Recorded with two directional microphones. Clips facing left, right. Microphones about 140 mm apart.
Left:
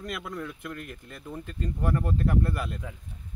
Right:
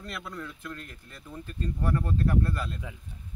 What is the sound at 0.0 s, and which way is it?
Speech, 15° left (ahead or behind).